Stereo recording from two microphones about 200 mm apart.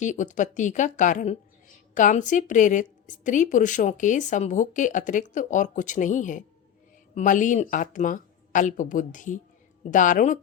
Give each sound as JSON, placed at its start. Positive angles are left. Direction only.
{"t": 0.0, "sound": "speech", "side_deg": 40}